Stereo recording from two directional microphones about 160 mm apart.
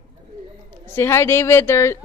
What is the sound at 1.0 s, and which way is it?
Speech, 15° left (ahead or behind).